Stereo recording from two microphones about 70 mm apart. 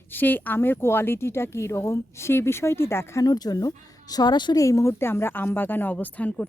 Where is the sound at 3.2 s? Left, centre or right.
Left.